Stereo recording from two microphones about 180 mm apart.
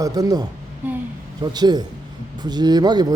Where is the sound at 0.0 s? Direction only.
20° right (ahead or behind).